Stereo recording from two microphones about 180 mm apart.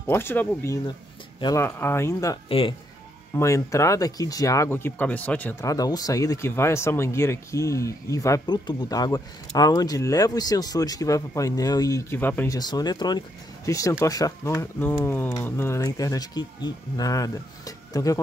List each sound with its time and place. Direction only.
0.0 s speech: 10° left (ahead or behind)
3.3 s speech: 15° left (ahead or behind)
12.5 s speech: 20° left (ahead or behind)